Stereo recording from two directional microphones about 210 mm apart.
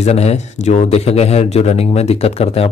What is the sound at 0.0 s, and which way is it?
Speech, 30° left (ahead or behind).